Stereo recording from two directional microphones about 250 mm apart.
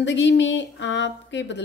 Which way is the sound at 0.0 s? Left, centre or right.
Left.